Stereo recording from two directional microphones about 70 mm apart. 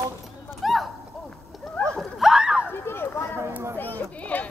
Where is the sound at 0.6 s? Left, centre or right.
Centre.